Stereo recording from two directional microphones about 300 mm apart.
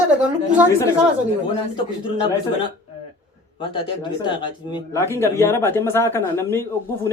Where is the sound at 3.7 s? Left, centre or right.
Centre.